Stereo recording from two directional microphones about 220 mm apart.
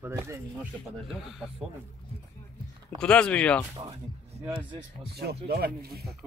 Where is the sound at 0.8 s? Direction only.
Centre (ahead or behind).